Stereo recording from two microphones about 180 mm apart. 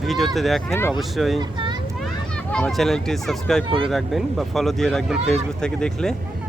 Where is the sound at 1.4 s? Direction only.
25° right (ahead or behind).